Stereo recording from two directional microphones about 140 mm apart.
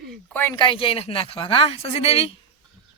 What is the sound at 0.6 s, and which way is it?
A man's voice, 35° left (ahead or behind).